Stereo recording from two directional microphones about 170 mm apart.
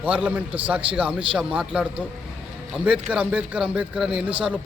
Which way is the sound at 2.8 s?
5° right (ahead or behind).